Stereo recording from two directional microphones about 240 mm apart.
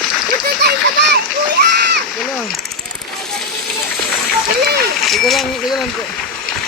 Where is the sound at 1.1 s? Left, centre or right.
Right.